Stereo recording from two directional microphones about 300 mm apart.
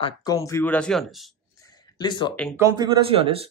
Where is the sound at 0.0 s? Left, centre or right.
Centre.